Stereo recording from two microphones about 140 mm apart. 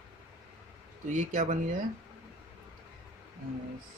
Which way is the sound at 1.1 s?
60° right (ahead or behind).